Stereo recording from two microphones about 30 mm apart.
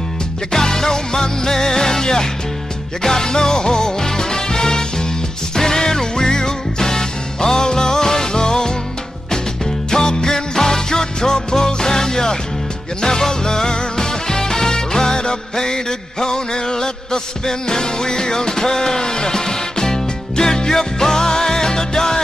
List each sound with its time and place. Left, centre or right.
0.5 s music: centre
9.8 s music: centre